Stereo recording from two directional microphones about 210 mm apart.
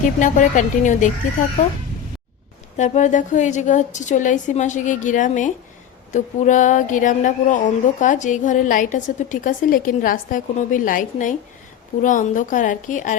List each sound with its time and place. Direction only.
0.2 s speech: 35° left (ahead or behind)
2.7 s speech: 35° left (ahead or behind)